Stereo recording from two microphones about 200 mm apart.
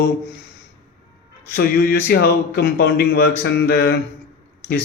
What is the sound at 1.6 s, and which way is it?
A man's voice, 50° left (ahead or behind).